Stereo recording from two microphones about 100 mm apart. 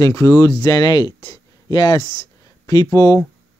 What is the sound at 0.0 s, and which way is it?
Speech, 35° left (ahead or behind).